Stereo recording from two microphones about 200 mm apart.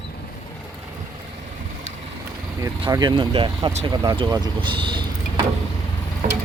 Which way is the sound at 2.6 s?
20° right (ahead or behind).